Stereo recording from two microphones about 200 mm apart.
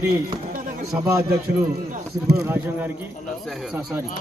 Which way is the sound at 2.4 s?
10° right (ahead or behind).